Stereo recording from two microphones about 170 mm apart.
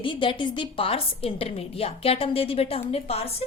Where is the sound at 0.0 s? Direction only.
30° left (ahead or behind).